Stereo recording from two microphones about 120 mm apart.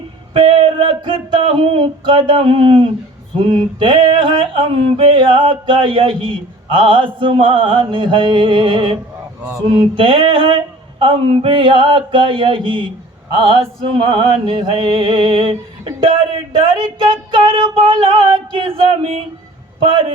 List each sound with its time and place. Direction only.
0.3 s music: 50° right (ahead or behind)